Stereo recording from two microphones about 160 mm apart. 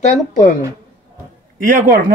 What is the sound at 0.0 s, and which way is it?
Speech, 50° left (ahead or behind).